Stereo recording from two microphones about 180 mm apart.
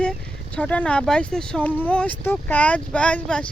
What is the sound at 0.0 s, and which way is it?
Speech, 5° left (ahead or behind).